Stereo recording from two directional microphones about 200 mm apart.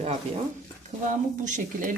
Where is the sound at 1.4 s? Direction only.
40° right (ahead or behind).